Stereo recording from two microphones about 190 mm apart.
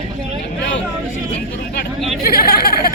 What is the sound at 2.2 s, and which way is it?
Speech, 55° left (ahead or behind).